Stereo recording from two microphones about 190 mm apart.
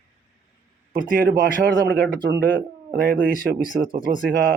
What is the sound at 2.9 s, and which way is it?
Speech, 50° right (ahead or behind).